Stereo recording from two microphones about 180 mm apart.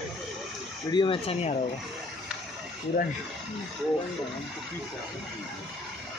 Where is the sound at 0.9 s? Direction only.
25° left (ahead or behind).